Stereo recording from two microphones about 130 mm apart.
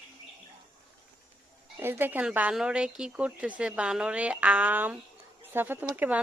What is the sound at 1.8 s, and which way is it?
Speech, 15° right (ahead or behind).